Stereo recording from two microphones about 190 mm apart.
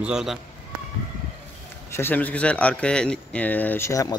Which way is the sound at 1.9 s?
10° left (ahead or behind).